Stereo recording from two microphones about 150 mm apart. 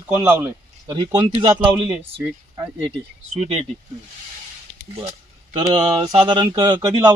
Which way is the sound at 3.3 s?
45° right (ahead or behind).